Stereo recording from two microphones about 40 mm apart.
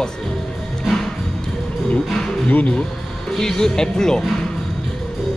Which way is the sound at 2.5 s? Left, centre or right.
Left.